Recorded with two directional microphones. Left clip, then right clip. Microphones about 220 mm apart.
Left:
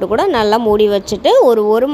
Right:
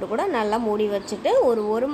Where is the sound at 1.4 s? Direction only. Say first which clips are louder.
Left 10 dB; 35° left (ahead or behind).